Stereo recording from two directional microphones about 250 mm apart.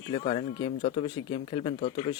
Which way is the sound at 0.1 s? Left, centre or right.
Left.